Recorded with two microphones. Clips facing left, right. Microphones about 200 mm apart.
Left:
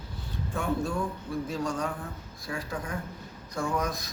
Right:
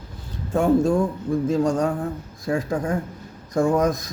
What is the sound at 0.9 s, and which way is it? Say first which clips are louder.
Speech: right 11 dB; 45° right (ahead or behind).